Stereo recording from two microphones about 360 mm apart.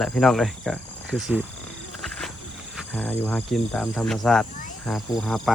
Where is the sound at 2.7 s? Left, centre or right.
Centre.